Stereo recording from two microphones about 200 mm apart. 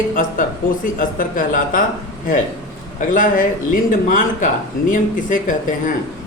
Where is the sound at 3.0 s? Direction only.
40° left (ahead or behind).